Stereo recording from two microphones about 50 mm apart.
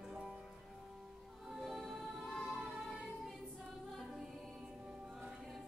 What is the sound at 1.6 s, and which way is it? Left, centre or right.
Music, centre.